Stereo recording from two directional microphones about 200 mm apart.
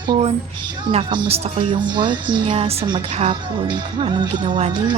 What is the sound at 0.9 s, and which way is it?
Speech, 25° right (ahead or behind).